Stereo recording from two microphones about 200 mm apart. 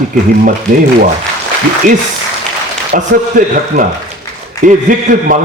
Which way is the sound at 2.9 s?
45° right (ahead or behind).